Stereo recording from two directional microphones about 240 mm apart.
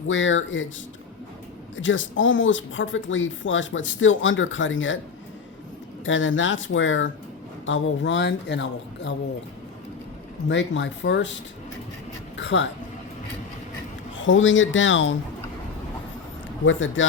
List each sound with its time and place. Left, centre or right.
0.1 s speech: left
1.7 s speech: left
6.1 s speech: left
10.5 s speech: left
12.4 s speech: left
14.2 s speech: left
16.6 s speech: left